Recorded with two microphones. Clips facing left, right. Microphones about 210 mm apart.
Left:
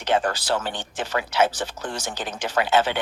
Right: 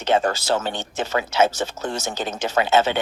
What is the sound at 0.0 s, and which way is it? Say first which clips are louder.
Speech: right 3 dB; 25° right (ahead or behind).